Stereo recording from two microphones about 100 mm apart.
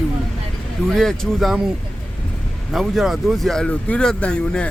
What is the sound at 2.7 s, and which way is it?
Speech, centre (ahead or behind).